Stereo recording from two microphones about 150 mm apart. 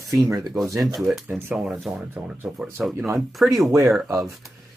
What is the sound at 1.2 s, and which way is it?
Speech, 15° right (ahead or behind).